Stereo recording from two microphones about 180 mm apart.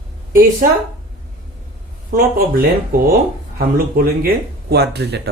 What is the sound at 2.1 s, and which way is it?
Speech, 55° right (ahead or behind).